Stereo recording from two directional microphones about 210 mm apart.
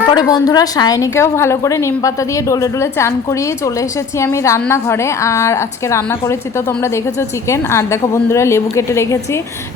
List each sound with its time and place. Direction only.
0.1 s a woman's voice: 20° left (ahead or behind)